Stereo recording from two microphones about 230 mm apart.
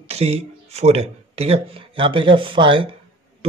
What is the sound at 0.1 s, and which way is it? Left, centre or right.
Speech, right.